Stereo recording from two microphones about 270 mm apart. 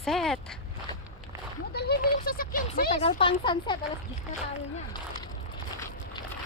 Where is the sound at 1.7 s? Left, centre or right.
Left; by 3.7 s centre.